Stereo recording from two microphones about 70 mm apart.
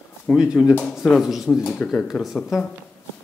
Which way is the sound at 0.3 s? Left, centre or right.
Centre.